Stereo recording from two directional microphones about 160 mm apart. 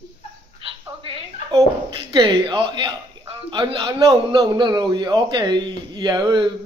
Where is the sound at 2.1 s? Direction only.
25° right (ahead or behind).